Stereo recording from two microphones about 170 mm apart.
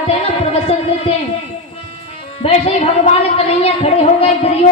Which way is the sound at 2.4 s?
35° left (ahead or behind).